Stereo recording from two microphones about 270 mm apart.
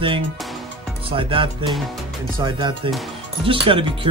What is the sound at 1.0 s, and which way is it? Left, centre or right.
Speech, centre.